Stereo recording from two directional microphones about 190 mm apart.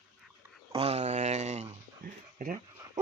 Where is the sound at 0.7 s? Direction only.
30° right (ahead or behind).